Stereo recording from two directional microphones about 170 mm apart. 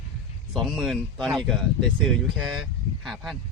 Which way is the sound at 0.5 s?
Centre (ahead or behind).